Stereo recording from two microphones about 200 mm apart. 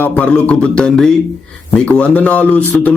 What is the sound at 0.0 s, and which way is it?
A man's voice, 5° left (ahead or behind).